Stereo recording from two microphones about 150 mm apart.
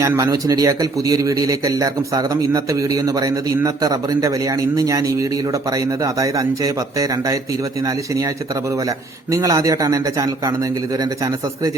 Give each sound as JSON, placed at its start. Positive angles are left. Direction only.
{"t": 0.0, "sound": "a man's voice", "side_deg": -20}
{"t": 9.3, "sound": "a man's voice", "side_deg": -20}